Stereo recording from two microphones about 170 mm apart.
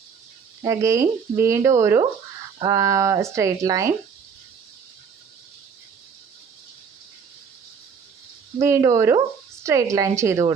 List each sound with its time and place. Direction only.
0.6 s speech: 20° right (ahead or behind)
8.6 s speech: 15° right (ahead or behind)